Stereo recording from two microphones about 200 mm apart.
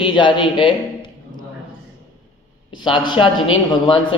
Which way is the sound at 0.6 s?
25° left (ahead or behind).